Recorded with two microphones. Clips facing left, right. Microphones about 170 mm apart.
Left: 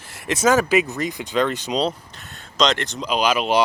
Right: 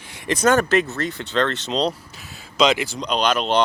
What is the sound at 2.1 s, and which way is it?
Speech, centre (ahead or behind).